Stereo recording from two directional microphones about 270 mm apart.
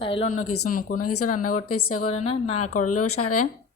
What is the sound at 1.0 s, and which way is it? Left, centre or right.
A woman's voice, left.